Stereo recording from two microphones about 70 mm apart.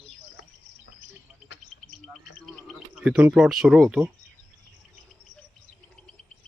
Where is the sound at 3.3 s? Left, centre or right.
Centre.